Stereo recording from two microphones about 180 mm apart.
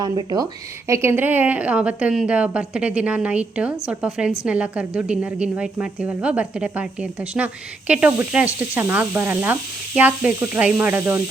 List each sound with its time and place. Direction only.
0.0 s a woman's voice: 20° right (ahead or behind)